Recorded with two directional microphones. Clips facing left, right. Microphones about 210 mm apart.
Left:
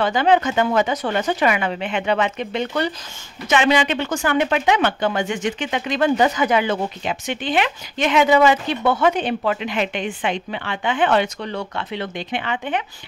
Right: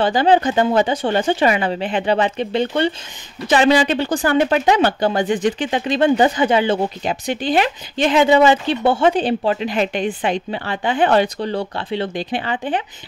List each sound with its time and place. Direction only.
0.0 s speech: 35° right (ahead or behind)